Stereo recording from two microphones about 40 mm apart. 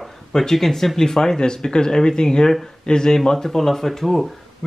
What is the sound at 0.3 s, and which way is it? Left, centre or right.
Speech, centre.